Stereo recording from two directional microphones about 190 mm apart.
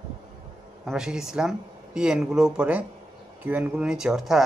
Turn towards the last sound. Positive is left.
turn(degrees=0)  # may be behind; listen again after turning